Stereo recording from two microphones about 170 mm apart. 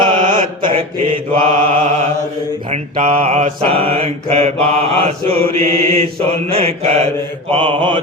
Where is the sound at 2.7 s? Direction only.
40° right (ahead or behind).